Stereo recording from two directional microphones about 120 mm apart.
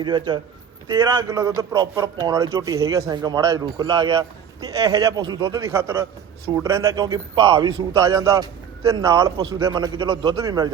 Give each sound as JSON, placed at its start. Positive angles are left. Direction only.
{"t": 0.0, "sound": "speech", "side_deg": -40}
{"t": 7.9, "sound": "speech", "side_deg": -30}